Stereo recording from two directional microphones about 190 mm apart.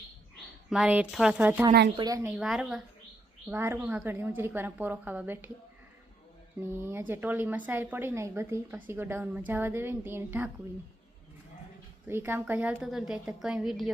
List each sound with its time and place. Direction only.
0.7 s a woman's voice: 5° right (ahead or behind)
2.3 s a woman's voice: centre (ahead or behind)
6.6 s a woman's voice: 10° right (ahead or behind)
12.0 s a woman's voice: 10° right (ahead or behind)